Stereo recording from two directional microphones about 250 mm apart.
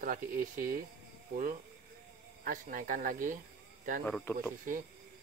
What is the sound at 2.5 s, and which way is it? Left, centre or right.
Speech, right.